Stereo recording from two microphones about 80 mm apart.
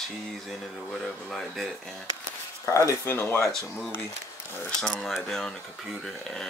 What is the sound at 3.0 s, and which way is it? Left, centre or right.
Speech, left.